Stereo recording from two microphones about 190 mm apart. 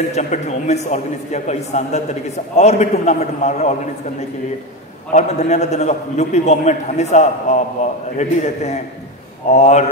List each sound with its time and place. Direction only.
0.1 s a man's voice: 40° left (ahead or behind)
5.1 s a man's voice: 35° left (ahead or behind)